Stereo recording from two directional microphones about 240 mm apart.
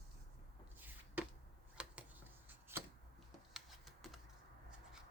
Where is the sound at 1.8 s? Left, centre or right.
Centre.